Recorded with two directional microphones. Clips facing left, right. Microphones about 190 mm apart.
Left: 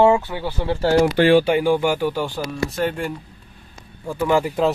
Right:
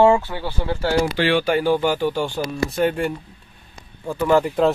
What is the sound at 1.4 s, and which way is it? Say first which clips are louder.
Speech: left 1 dB; 15° left (ahead or behind).